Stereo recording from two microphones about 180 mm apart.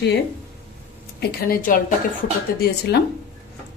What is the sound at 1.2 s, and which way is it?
Speech, 55° left (ahead or behind).